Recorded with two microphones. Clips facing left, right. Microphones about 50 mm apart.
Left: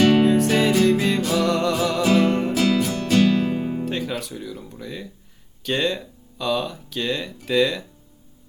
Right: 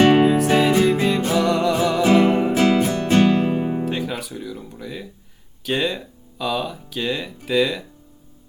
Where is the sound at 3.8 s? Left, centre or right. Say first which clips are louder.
Right 2 dB; centre.